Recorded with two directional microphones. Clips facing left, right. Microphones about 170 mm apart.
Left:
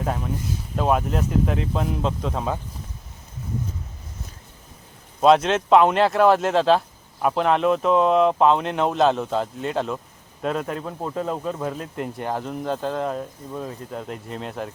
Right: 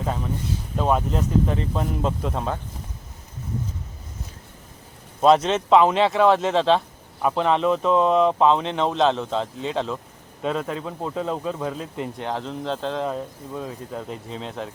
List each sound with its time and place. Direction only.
0.0 s speech: 5° left (ahead or behind)
5.2 s speech: centre (ahead or behind)